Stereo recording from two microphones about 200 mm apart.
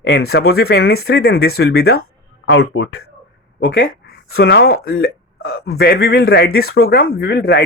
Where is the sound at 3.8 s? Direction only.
50° left (ahead or behind).